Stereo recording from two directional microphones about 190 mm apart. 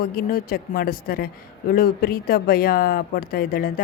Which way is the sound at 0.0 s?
50° left (ahead or behind).